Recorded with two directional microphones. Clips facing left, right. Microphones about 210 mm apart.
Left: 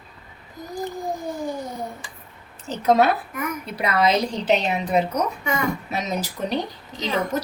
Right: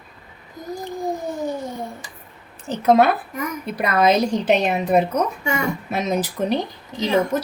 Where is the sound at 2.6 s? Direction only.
55° right (ahead or behind).